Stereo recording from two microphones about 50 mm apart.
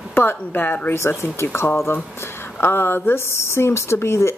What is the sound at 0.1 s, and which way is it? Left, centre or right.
Speech, left.